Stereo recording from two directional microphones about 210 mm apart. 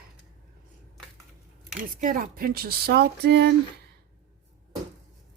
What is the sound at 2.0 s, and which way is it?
Speech, 40° right (ahead or behind).